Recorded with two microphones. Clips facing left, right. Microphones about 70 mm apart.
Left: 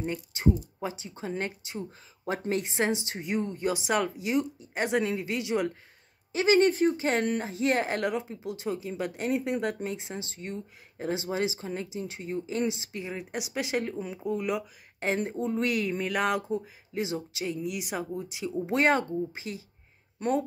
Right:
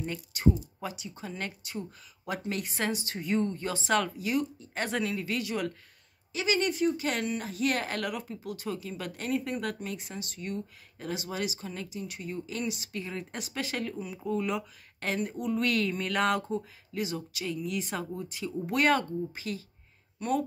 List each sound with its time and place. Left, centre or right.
0.0 s speech: left
6.3 s speech: left; by 14.5 s centre
15.1 s speech: left; by 16.6 s centre
16.9 s speech: left